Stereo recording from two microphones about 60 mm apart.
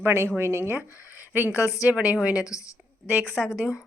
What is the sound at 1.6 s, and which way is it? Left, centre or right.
Speech, left.